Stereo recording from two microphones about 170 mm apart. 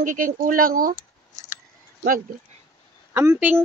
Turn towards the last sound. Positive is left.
turn(degrees=-15)  # may be behind; listen again after turning